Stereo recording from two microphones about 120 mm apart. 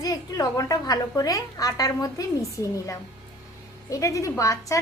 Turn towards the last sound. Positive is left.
turn(degrees=25)  # may be behind; listen again after turning